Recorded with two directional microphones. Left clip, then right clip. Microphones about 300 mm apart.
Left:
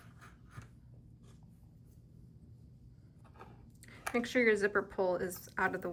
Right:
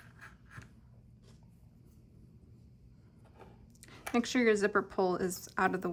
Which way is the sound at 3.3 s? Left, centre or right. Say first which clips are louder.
Left 1 dB; centre.